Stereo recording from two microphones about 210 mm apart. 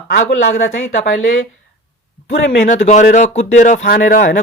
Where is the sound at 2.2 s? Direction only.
35° left (ahead or behind).